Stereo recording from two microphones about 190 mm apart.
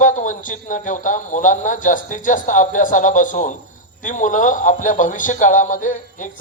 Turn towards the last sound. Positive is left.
turn(degrees=40)  # may be behind; listen again after turning